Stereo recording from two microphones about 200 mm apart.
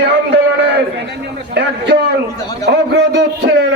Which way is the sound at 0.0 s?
55° right (ahead or behind).